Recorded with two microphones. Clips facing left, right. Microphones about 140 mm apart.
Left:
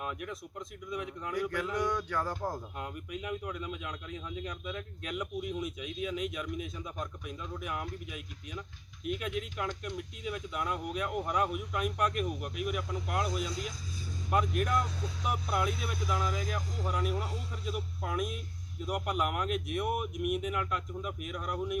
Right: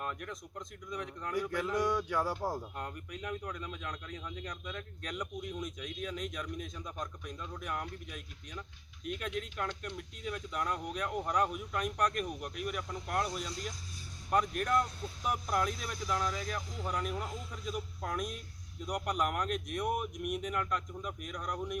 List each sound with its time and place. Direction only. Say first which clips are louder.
0.0 s speech: left 2 dB; 5° left (ahead or behind)
1.4 s speech: even; 10° right (ahead or behind)
2.7 s speech: left 2 dB; 5° left (ahead or behind)